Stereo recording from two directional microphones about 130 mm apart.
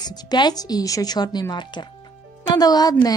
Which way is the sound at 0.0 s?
30° left (ahead or behind).